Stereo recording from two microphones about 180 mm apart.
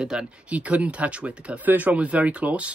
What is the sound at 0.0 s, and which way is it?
Speech, 5° right (ahead or behind).